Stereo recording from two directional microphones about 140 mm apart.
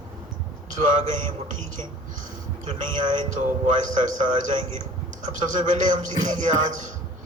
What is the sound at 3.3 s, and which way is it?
Speech, 65° right (ahead or behind).